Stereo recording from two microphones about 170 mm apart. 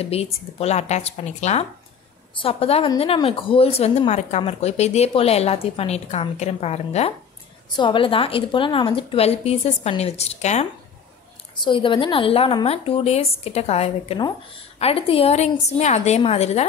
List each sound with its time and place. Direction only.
0.0 s speech: 35° left (ahead or behind)
11.6 s speech: 30° left (ahead or behind)